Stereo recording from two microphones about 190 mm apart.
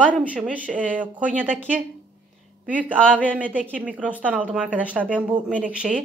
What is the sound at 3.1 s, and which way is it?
Speech, 10° right (ahead or behind).